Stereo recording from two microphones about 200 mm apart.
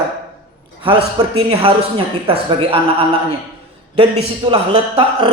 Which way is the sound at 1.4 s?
30° right (ahead or behind).